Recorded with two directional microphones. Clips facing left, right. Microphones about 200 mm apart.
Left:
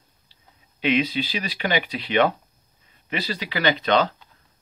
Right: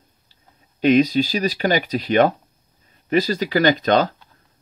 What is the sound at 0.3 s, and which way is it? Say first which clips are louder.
Speech: right 1 dB; 45° right (ahead or behind).